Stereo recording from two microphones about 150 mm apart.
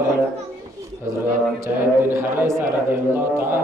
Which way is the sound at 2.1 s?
15° right (ahead or behind).